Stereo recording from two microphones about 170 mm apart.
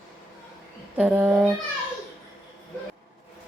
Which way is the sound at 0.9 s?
10° right (ahead or behind).